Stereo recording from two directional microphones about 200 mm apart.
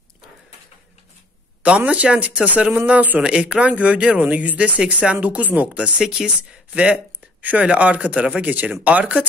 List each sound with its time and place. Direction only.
1.6 s speech: 5° right (ahead or behind)